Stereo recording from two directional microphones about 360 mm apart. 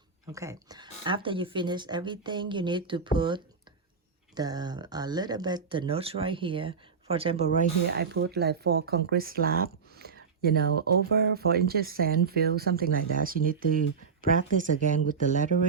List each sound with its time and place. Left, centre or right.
0.3 s speech: centre